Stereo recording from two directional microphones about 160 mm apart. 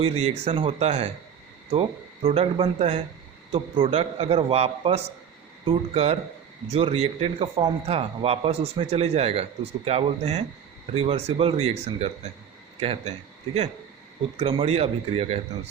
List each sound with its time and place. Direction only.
0.0 s a man's voice: 40° right (ahead or behind)
2.2 s a man's voice: 35° right (ahead or behind)